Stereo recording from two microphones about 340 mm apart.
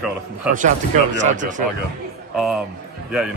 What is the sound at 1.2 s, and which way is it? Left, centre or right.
Speech, right.